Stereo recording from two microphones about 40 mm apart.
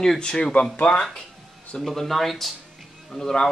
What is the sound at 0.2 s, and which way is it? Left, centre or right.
Speech, left.